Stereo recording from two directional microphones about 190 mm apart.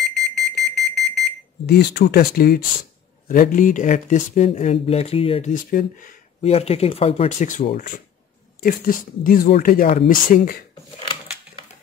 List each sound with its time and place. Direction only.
0.1 s alarm: centre (ahead or behind)
1.7 s speech: 60° left (ahead or behind); by 5.5 s 30° left (ahead or behind)
5.5 s speech: 45° left (ahead or behind)
6.5 s speech: 35° left (ahead or behind)